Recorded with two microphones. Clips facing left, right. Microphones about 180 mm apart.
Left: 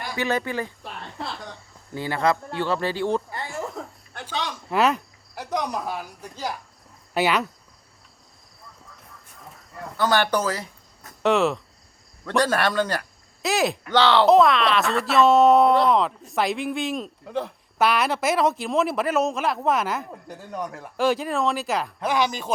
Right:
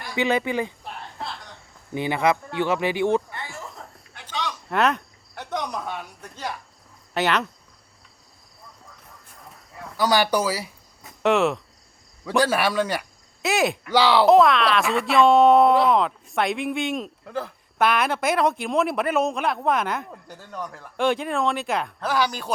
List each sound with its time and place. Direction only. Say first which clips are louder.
0.2 s speech: right 3 dB; 15° right (ahead or behind)
1.9 s speech: right 1 dB; 20° right (ahead or behind)
3.4 s chuckle: left 6 dB; centre (ahead or behind)
4.5 s speech: left 1 dB; centre (ahead or behind)
9.5 s a sound: left 3 dB; centre (ahead or behind)
10.0 s speech: right 1 dB; 10° right (ahead or behind)
14.3 s speech: right 1 dB; centre (ahead or behind)